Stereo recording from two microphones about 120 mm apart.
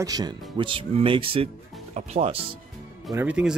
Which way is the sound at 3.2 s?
10° right (ahead or behind).